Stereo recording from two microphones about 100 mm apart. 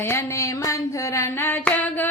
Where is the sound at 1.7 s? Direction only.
15° left (ahead or behind).